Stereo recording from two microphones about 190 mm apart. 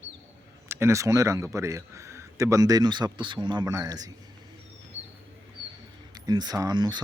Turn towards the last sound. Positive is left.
turn(degrees=-20)  # may be behind; listen again after turning